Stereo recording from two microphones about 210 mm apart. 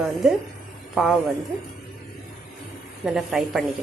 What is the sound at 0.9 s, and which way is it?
Speech, centre (ahead or behind).